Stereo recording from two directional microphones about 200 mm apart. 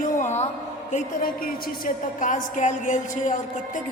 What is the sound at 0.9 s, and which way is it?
A woman's voice, 40° left (ahead or behind).